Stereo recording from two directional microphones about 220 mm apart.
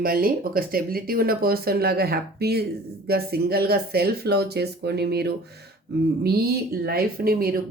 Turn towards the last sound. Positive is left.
turn(degrees=-40)  # may be behind; listen again after turning